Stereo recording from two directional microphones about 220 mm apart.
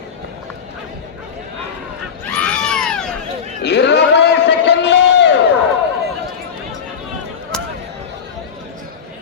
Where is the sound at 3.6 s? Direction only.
50° left (ahead or behind).